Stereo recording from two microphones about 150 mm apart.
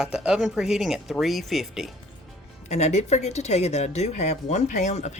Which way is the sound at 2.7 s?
50° left (ahead or behind).